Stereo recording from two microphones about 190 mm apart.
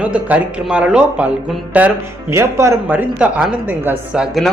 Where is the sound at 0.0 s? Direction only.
5° right (ahead or behind).